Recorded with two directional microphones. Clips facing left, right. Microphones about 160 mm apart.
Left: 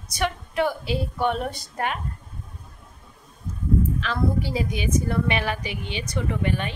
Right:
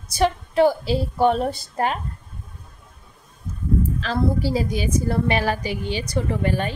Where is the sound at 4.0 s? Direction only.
35° right (ahead or behind).